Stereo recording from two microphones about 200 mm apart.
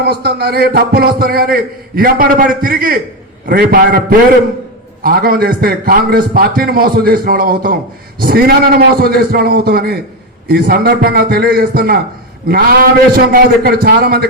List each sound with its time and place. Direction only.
0.0 s a man's voice: 55° right (ahead or behind)
5.0 s a man's voice: 50° right (ahead or behind)